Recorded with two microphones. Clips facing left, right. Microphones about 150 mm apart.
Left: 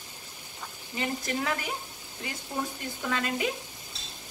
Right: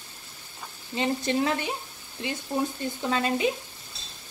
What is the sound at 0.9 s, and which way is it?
Speech, 25° right (ahead or behind).